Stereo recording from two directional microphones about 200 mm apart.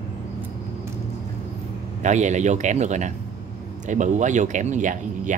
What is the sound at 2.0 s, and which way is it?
Speech, 35° right (ahead or behind).